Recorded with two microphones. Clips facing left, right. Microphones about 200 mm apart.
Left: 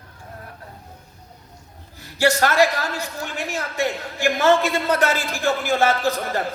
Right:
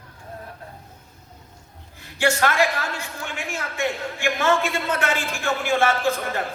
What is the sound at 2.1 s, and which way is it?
Speech, 40° left (ahead or behind).